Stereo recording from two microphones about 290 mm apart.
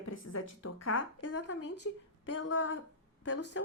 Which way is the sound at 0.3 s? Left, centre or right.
Left.